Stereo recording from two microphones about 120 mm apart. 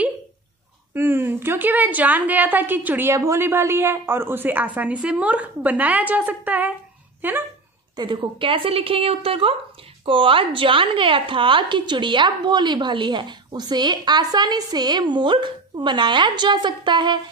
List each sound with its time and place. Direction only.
0.9 s a woman's voice: 20° right (ahead or behind)
7.9 s a woman's voice: 40° right (ahead or behind)